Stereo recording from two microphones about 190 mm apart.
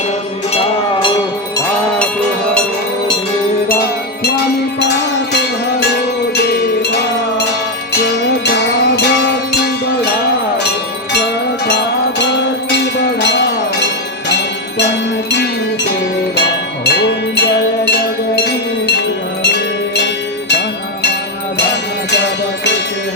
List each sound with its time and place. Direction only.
4.8 s music: 65° left (ahead or behind)
5.8 s a sound: 60° left (ahead or behind)
7.9 s music: 65° left (ahead or behind)
11.1 s cowbell: 60° left (ahead or behind)
14.8 s music: 65° left (ahead or behind)
16.8 s wind chime: 60° left (ahead or behind)
20.5 s music: 65° left (ahead or behind)